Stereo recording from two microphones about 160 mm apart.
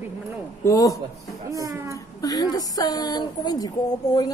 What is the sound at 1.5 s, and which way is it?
Speech, 20° right (ahead or behind).